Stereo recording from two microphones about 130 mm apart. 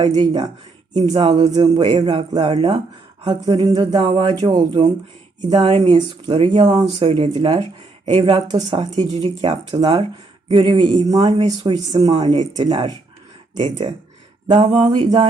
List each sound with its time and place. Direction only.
0.0 s speech: 35° right (ahead or behind)
14.5 s a sound: 50° right (ahead or behind)
14.8 s speech: 35° right (ahead or behind)